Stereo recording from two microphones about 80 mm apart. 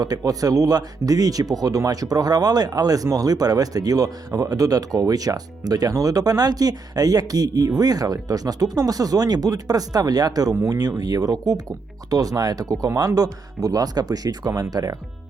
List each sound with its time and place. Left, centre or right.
0.0 s speech: right
10.5 s speech: right
10.8 s speech: right